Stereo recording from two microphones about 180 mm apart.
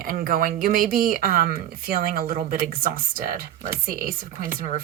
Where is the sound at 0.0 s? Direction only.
50° right (ahead or behind).